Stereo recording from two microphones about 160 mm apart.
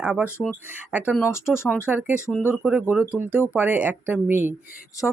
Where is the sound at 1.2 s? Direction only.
15° left (ahead or behind).